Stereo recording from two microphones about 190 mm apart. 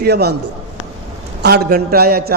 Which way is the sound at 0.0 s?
60° right (ahead or behind).